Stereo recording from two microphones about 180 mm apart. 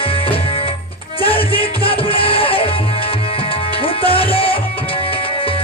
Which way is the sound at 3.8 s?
30° left (ahead or behind).